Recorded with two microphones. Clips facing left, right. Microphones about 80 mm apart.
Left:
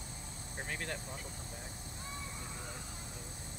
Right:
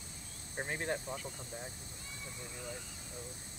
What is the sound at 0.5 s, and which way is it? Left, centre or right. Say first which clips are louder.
Speech: right 4 dB; right.